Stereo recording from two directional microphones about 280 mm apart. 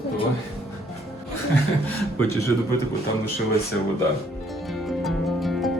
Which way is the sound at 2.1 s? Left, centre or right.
Left.